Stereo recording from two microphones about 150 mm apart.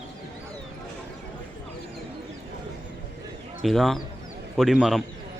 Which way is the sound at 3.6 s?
Centre (ahead or behind).